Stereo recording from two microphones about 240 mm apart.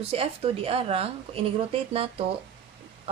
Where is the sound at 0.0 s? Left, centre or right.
Right.